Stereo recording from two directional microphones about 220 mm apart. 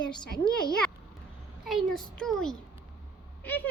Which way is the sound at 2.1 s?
Centre (ahead or behind).